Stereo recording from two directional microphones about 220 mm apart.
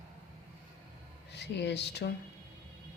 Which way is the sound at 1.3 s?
50° left (ahead or behind).